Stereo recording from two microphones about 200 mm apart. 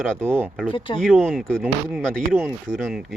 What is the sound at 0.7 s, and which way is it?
Speech, 25° left (ahead or behind).